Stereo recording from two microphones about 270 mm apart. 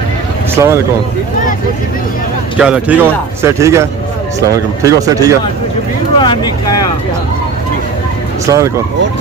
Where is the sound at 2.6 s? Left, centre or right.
Centre.